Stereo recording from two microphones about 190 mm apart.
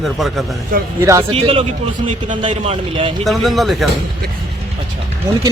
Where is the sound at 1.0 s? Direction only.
15° right (ahead or behind).